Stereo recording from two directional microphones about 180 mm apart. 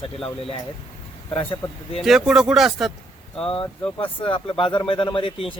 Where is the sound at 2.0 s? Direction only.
Centre (ahead or behind).